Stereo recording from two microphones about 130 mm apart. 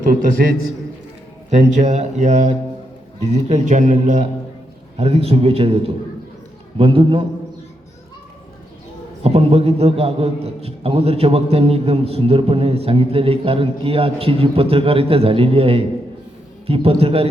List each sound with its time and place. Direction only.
1.5 s speech: 60° right (ahead or behind)
4.9 s a man's voice: 50° right (ahead or behind)
9.2 s a man's voice: 50° right (ahead or behind)